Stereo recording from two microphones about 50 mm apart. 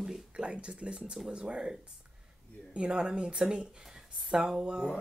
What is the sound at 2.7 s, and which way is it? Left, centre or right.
Speech, centre.